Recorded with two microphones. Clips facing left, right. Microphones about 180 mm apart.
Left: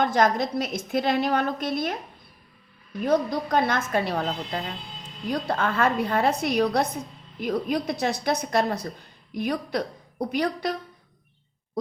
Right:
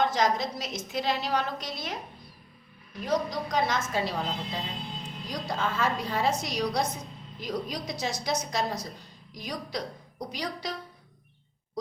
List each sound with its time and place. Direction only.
0.0 s a woman's voice: 55° left (ahead or behind)
3.0 s a woman's voice: 55° left (ahead or behind)